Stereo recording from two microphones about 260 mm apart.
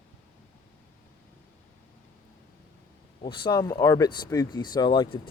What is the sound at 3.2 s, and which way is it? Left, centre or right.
Speech, centre.